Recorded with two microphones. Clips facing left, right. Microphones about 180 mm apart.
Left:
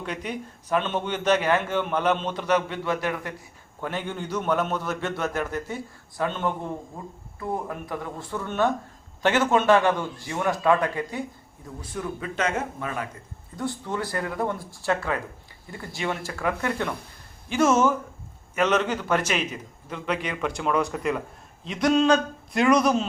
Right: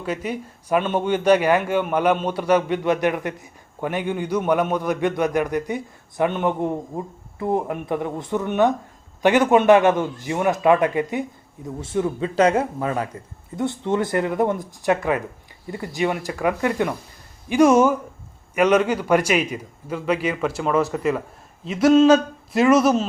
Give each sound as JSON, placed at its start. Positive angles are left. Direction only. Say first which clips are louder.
{"t": 0.0, "sound": "a man's voice", "louder": "right 5 dB", "side_deg": -5}